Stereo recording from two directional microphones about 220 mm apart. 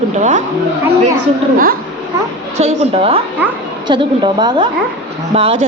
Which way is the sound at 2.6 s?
30° right (ahead or behind).